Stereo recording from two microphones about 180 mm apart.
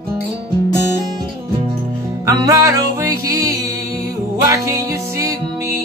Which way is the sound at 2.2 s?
20° right (ahead or behind).